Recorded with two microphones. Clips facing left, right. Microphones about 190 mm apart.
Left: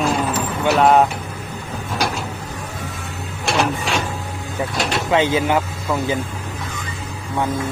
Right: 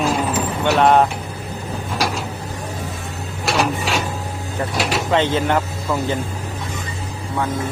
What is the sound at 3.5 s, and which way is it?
Printer, centre (ahead or behind).